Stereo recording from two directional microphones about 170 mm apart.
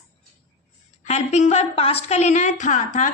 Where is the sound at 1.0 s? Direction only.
40° left (ahead or behind).